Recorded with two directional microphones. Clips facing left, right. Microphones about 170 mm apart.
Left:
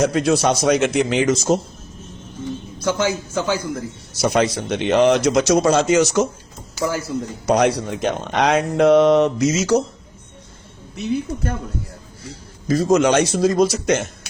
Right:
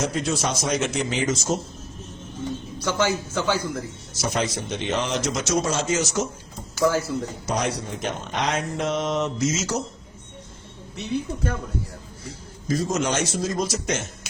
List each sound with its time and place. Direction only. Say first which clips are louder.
0.0 s speech: left 8 dB; 65° left (ahead or behind)
2.8 s a man's voice: left 3 dB; 15° left (ahead or behind)
4.2 s speech: left 8 dB; 65° left (ahead or behind)
6.7 s speech: right 2 dB; 15° left (ahead or behind)
7.4 s speech: left 13 dB; 70° left (ahead or behind)
10.9 s speech: left 5 dB; centre (ahead or behind)
12.6 s speech: left 8 dB; 70° left (ahead or behind)